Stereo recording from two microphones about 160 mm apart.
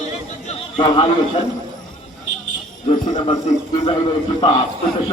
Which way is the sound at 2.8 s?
45° left (ahead or behind).